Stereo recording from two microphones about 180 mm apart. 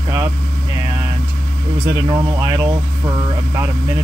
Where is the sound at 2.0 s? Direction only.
20° right (ahead or behind).